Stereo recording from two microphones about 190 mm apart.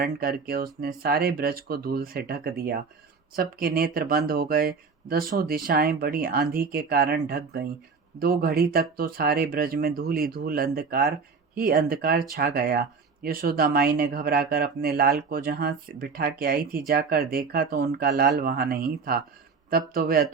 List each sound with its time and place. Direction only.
0.0 s speech: 50° right (ahead or behind)